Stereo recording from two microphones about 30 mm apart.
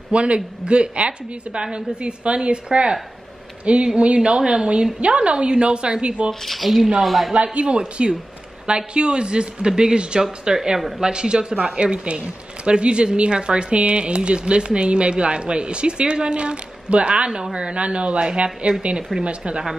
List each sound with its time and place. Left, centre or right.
0.1 s a woman's voice: right
6.4 s speech: centre
7.5 s a woman's voice: right